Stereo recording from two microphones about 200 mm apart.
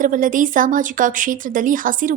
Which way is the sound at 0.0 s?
40° right (ahead or behind).